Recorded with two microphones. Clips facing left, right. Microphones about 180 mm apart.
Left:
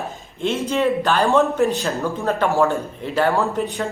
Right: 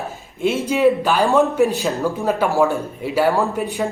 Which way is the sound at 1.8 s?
Centre (ahead or behind).